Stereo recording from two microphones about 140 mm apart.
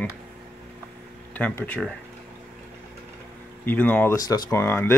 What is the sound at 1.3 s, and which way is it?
Speech, 10° left (ahead or behind).